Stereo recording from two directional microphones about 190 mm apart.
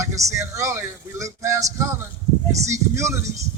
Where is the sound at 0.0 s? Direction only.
15° right (ahead or behind).